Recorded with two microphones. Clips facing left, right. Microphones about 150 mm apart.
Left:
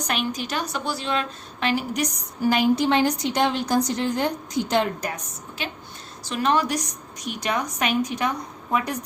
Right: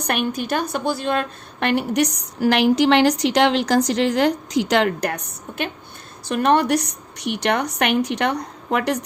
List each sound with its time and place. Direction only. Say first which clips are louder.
0.0 s a woman's voice: right 4 dB; 55° right (ahead or behind); by 9.0 s 75° right (ahead or behind)